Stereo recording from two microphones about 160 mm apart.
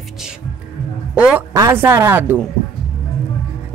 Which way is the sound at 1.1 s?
5° right (ahead or behind).